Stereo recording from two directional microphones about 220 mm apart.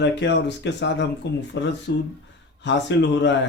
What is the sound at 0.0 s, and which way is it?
Speech, 55° left (ahead or behind).